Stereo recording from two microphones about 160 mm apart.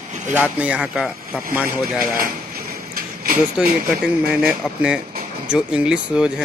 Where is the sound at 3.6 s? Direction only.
5° right (ahead or behind).